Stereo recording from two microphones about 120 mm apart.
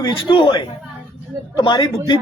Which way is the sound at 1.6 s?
40° left (ahead or behind).